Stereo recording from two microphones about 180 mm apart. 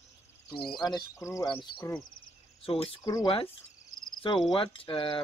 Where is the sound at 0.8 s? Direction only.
20° left (ahead or behind).